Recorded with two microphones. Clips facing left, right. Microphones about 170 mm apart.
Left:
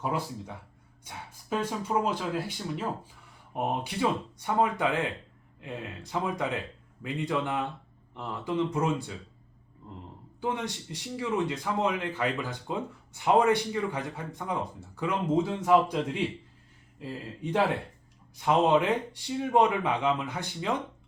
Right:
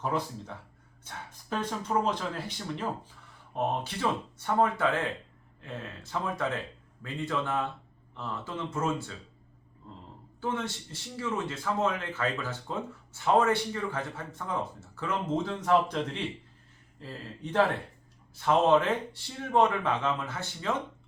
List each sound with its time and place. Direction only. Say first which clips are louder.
0.0 s a man's voice: even; 10° left (ahead or behind)
1.0 s a sound: even; 10° left (ahead or behind)
2.0 s a man's voice: left 1 dB; 5° left (ahead or behind)
10.4 s a man's voice: left 1 dB; 15° left (ahead or behind)